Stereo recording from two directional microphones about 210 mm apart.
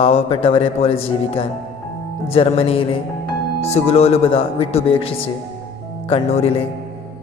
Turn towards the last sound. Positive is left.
turn(degrees=30)  # may be behind; listen again after turning